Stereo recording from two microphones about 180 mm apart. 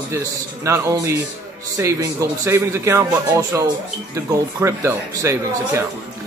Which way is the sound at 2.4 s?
15° right (ahead or behind).